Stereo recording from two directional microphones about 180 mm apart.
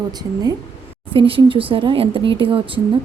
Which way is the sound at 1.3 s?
30° right (ahead or behind).